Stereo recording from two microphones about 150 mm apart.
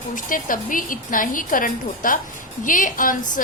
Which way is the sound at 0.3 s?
65° left (ahead or behind).